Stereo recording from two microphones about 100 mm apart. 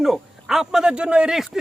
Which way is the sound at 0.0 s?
5° right (ahead or behind).